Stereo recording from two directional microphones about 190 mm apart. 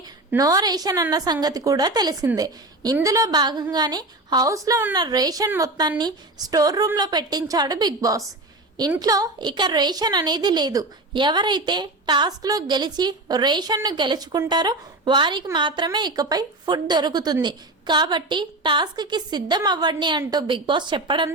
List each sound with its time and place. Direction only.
0.3 s a woman's voice: 20° right (ahead or behind)